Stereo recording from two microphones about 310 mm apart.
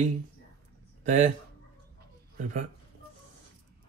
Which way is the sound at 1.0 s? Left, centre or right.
Right.